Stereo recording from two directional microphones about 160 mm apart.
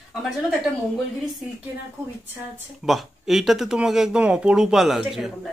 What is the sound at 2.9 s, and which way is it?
Speech, centre (ahead or behind).